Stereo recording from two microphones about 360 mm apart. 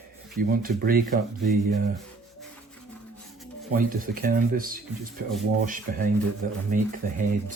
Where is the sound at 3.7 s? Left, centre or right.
Right.